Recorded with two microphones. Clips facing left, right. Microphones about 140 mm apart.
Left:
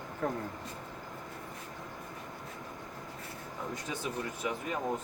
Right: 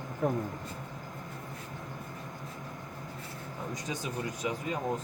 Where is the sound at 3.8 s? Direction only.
15° right (ahead or behind).